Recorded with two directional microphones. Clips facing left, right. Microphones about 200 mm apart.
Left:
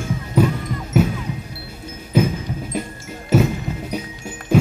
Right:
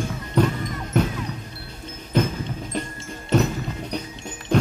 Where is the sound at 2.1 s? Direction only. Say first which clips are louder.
Left 4 dB; 10° left (ahead or behind).